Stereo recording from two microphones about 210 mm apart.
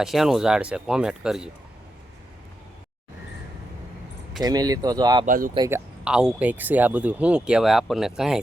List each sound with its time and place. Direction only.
0.0 s speech: centre (ahead or behind)
4.4 s speech: 20° right (ahead or behind)
5.2 s speech: 40° right (ahead or behind)
5.5 s speech: 15° right (ahead or behind)
6.1 s speech: 5° right (ahead or behind)